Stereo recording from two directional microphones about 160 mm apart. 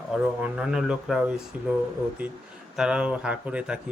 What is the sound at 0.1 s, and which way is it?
A man's voice, 5° right (ahead or behind).